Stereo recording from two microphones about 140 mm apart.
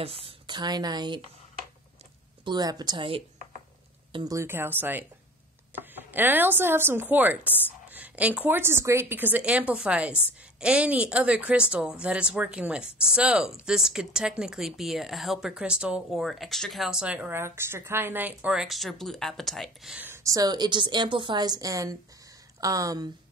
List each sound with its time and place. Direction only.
0.0 s speech: 45° right (ahead or behind)
2.4 s speech: 30° right (ahead or behind)
4.1 s a woman's voice: 25° right (ahead or behind); by 20.0 s centre (ahead or behind)
20.0 s a woman's voice: 20° right (ahead or behind)